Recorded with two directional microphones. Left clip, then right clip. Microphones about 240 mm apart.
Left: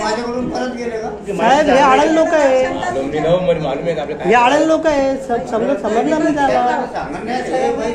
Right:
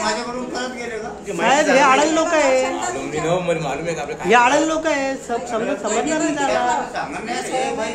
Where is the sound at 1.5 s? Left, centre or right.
Centre.